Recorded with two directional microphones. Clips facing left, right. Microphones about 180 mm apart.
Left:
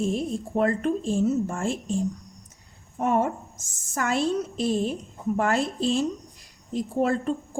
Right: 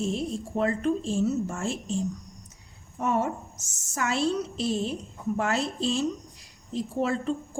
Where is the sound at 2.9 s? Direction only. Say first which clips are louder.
Left 3 dB; 50° left (ahead or behind).